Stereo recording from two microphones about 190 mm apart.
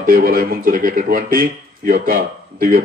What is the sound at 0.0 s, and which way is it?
Speech, 50° right (ahead or behind).